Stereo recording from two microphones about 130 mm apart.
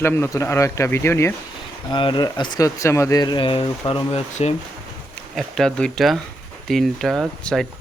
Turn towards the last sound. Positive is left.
turn(degrees=0)  # may be behind; listen again after turning